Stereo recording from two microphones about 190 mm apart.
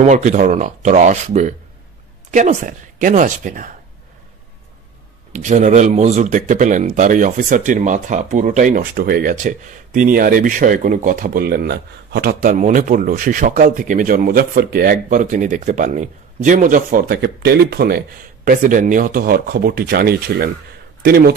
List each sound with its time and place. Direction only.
0.0 s speech: 40° right (ahead or behind)
5.3 s speech: 40° right (ahead or behind)
17.1 s speech: 60° right (ahead or behind)